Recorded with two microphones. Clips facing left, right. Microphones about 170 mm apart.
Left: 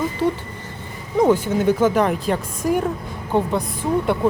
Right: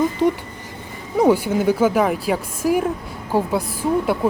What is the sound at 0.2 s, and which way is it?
A woman's voice, 15° right (ahead or behind).